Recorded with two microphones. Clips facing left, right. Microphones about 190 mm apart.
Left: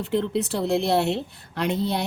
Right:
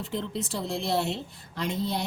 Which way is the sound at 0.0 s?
65° left (ahead or behind).